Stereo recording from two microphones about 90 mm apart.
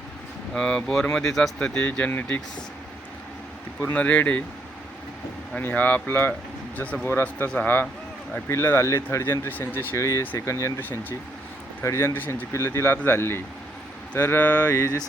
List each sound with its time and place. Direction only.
0.5 s speech: 10° left (ahead or behind)
3.8 s speech: 20° left (ahead or behind)
5.5 s speech: 20° left (ahead or behind)
8.4 s speech: 30° left (ahead or behind)
11.8 s speech: 30° left (ahead or behind)
12.5 s speech: 30° left (ahead or behind)